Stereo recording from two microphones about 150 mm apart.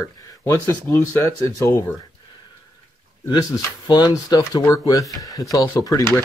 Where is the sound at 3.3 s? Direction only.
25° left (ahead or behind).